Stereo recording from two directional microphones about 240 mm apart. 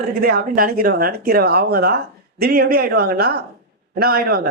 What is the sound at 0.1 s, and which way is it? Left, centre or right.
Speech, right.